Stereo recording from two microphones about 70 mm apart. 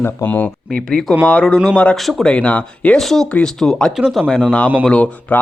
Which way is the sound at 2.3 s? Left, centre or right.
Centre.